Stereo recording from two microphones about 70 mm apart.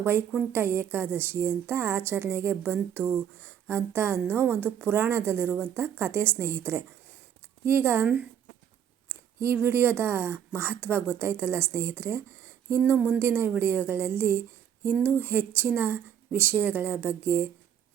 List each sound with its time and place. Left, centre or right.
0.0 s a woman's voice: right
9.0 s a sound: right
9.6 s a woman's voice: right